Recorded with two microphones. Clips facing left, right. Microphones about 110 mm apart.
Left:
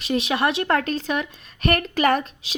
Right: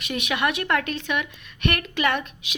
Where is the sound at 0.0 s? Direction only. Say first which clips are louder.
Left 4 dB; 30° left (ahead or behind).